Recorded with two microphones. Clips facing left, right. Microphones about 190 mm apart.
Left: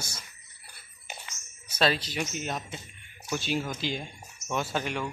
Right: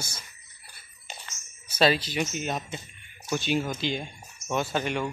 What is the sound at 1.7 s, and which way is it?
Speech, 5° right (ahead or behind).